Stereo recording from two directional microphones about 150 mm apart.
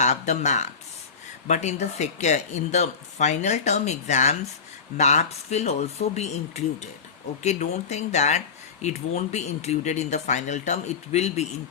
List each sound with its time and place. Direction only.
0.0 s speech: 50° left (ahead or behind)